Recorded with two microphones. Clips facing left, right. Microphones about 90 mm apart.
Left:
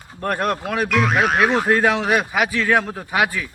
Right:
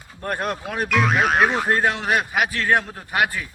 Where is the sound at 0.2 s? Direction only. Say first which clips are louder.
Left 4 dB; 90° left.